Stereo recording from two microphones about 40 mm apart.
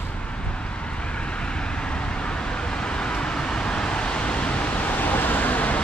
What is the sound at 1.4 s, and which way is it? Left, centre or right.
Vehicle, left.